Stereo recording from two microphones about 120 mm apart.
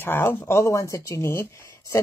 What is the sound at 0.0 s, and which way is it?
Speech, 20° left (ahead or behind).